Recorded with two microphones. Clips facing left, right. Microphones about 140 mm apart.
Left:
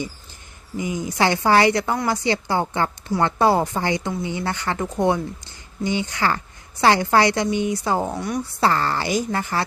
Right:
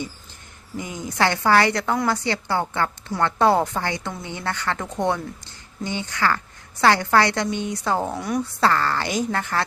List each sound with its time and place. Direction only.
0.8 s a woman's voice: 10° left (ahead or behind)
3.4 s speech: 5° left (ahead or behind)
3.8 s a woman's voice: 15° left (ahead or behind); by 8.4 s centre (ahead or behind)
8.6 s a woman's voice: 20° left (ahead or behind)
9.0 s speech: 5° left (ahead or behind)